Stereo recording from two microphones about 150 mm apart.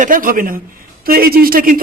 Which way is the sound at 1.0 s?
85° right.